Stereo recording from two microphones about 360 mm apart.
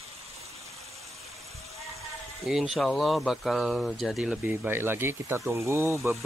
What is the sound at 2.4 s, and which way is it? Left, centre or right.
Speech, centre.